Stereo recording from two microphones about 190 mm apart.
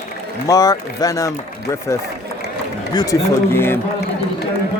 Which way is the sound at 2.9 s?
20° left (ahead or behind).